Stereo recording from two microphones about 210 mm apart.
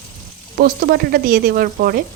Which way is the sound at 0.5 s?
45° right (ahead or behind).